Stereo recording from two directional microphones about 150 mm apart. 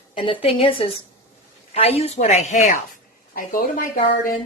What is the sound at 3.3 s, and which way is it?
Speech, 70° left (ahead or behind).